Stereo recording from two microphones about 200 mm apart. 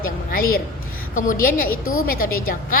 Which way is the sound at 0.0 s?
45° left (ahead or behind).